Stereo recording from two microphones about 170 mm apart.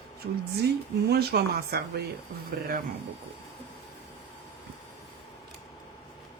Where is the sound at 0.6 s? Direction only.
70° right (ahead or behind).